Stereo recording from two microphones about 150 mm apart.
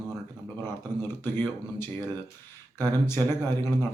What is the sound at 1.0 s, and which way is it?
A man's voice, 15° left (ahead or behind).